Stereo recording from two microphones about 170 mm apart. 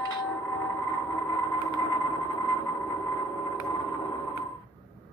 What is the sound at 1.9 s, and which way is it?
Vehicle, 25° left (ahead or behind).